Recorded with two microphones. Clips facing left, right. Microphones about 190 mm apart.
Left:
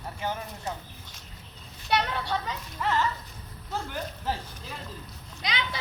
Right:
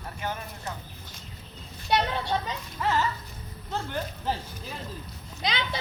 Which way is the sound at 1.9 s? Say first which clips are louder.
Right 2 dB; 20° right (ahead or behind).